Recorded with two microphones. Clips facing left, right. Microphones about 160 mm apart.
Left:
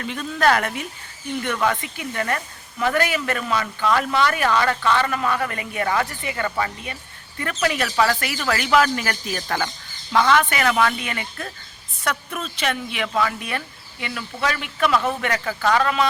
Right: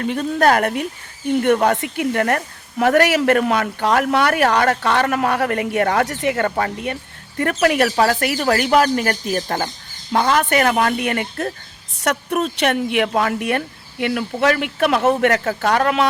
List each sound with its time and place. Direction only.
0.0 s speech: 45° right (ahead or behind)
1.8 s speech: 60° right (ahead or behind)
6.3 s speech: 55° right (ahead or behind)
12.1 s speech: 60° right (ahead or behind)